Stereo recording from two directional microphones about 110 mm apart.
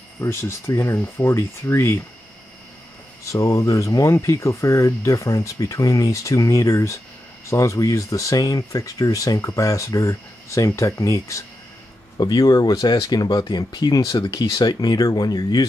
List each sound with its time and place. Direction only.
0.2 s speech: 25° left (ahead or behind)
3.3 s speech: 30° left (ahead or behind)